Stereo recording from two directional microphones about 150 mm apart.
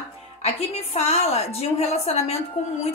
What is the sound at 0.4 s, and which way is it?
A woman's voice, 45° left (ahead or behind).